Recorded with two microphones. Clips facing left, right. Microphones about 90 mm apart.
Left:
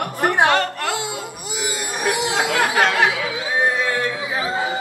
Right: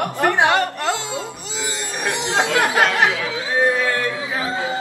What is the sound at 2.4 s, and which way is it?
Speech, 15° left (ahead or behind).